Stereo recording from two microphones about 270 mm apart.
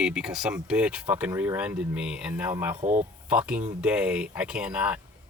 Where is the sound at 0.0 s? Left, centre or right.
Centre.